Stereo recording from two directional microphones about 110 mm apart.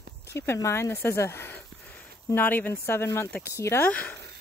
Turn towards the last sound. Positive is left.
turn(degrees=10)  # may be behind; listen again after turning